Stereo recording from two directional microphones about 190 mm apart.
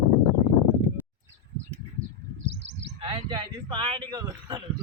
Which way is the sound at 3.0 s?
25° right (ahead or behind).